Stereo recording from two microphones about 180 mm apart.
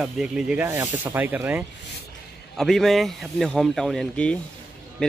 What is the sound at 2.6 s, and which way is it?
Speech, centre (ahead or behind).